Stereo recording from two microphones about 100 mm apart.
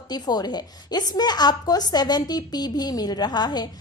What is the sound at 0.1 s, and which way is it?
A woman's voice, 45° left (ahead or behind).